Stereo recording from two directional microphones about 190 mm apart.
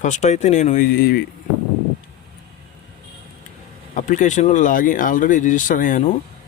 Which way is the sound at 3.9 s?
40° left (ahead or behind).